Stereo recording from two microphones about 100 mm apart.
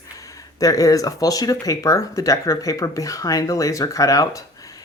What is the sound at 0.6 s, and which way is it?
Speech, 35° left (ahead or behind).